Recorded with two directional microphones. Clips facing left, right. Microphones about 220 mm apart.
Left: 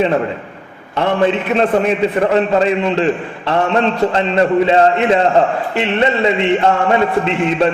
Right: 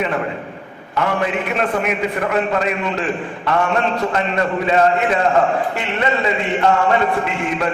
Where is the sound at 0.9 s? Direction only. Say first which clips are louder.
Left 5 dB; 30° left (ahead or behind).